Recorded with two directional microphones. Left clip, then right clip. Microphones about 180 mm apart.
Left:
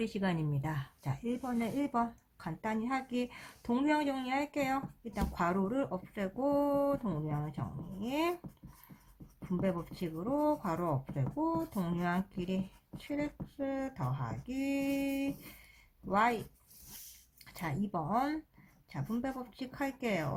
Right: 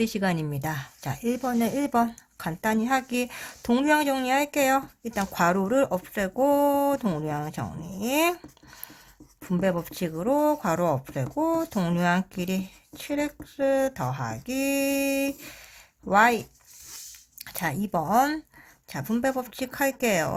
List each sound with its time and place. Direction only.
0.0 s speech: 35° right (ahead or behind)
9.6 s speech: 45° right (ahead or behind)
14.0 s speech: 55° right (ahead or behind)
17.4 s speech: 45° right (ahead or behind)